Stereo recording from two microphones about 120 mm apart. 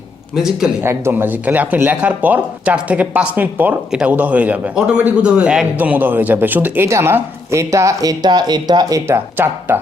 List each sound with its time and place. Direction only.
0.3 s speech: 5° right (ahead or behind)
0.8 s a man's voice: 20° right (ahead or behind)